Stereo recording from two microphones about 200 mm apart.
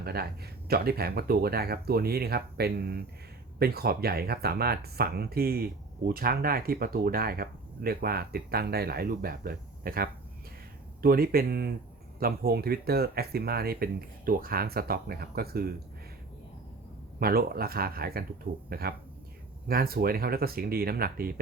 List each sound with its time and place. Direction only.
0.0 s speech: 50° right (ahead or behind)
17.2 s speech: 50° right (ahead or behind)